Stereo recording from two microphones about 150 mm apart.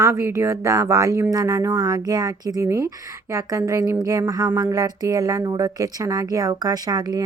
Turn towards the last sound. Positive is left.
turn(degrees=-25)  # may be behind; listen again after turning